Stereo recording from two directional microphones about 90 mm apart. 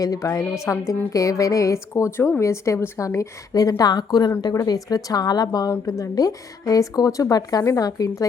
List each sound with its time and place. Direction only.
0.0 s speech: 40° left (ahead or behind)
3.2 s a woman's voice: 40° left (ahead or behind)